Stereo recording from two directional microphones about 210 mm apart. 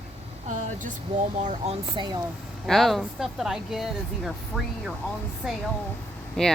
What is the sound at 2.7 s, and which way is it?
Speech, centre (ahead or behind).